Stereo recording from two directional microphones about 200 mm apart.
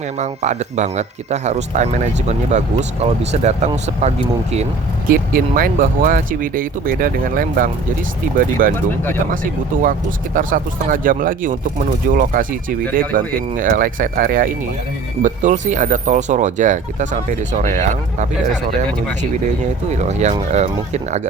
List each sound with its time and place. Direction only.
0.2 s speech: 35° right (ahead or behind)
5.0 s speech: 45° right (ahead or behind)
20.0 s speech: 35° right (ahead or behind)